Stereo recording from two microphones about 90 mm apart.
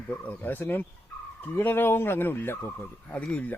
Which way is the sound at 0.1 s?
20° left (ahead or behind).